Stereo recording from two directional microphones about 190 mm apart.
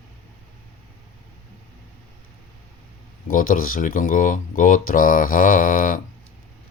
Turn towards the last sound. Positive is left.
turn(degrees=45)  # may be behind; listen again after turning